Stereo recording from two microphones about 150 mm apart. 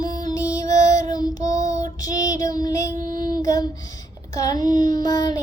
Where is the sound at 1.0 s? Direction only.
25° left (ahead or behind).